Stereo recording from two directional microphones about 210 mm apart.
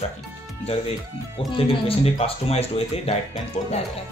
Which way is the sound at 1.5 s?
25° left (ahead or behind).